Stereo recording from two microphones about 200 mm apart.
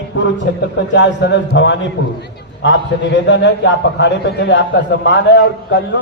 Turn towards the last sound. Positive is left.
turn(degrees=60)  # may be behind; listen again after turning